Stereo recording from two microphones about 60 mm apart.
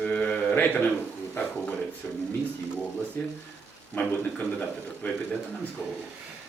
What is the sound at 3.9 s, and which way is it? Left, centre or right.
A man's voice, left.